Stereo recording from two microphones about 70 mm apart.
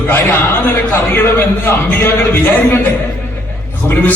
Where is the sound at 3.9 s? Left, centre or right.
Left.